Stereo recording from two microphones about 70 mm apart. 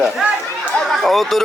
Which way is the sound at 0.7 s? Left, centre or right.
Centre.